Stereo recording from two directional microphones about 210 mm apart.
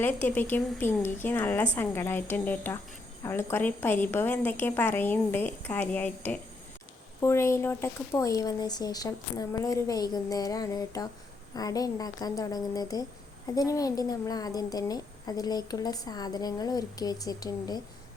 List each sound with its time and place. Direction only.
0.0 s a woman's voice: 10° left (ahead or behind)